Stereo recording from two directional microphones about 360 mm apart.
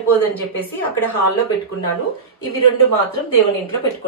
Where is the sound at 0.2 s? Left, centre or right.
Centre.